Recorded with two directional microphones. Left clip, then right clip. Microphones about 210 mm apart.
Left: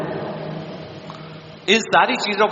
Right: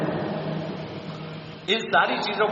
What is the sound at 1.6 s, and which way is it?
Speech, 55° left (ahead or behind).